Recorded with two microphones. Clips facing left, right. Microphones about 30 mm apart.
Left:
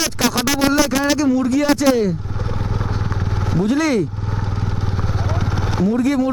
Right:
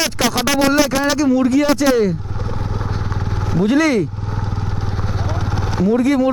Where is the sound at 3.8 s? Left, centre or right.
Centre.